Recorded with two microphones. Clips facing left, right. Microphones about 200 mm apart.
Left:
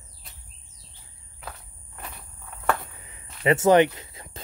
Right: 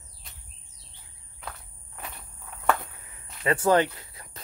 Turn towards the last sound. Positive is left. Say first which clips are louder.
# left 4 dB
turn(degrees=25)  # may be behind; listen again after turning